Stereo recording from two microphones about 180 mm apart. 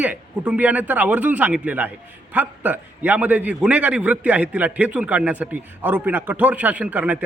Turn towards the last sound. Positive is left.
turn(degrees=-10)  # may be behind; listen again after turning